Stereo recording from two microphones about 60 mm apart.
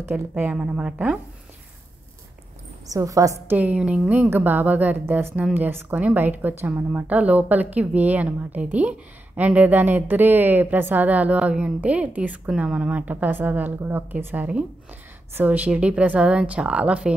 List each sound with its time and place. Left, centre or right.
0.3 s a woman's voice: right
2.9 s a woman's voice: right
3.4 s a woman's voice: right
4.1 s a woman's voice: right